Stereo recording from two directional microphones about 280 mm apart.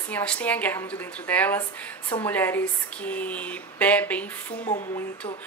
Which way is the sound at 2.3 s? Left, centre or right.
Centre.